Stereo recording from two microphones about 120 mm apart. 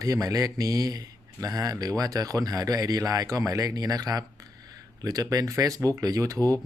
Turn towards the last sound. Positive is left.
turn(degrees=-30)  # may be behind; listen again after turning